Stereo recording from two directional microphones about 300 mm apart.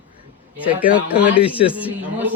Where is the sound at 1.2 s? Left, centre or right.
Centre.